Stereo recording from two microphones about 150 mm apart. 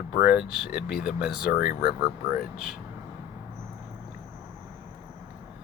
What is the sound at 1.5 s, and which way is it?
Speech, 85° left.